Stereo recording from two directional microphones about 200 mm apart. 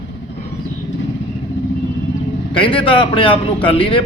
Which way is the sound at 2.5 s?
25° left (ahead or behind).